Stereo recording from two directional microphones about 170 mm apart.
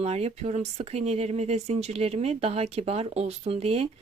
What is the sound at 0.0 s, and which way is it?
Speech, 40° right (ahead or behind).